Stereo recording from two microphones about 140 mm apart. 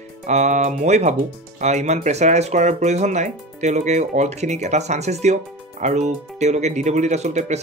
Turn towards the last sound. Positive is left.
turn(degrees=-50)  # may be behind; listen again after turning